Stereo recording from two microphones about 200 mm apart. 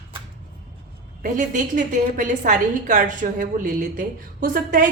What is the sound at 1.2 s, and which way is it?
A woman's voice, 40° right (ahead or behind).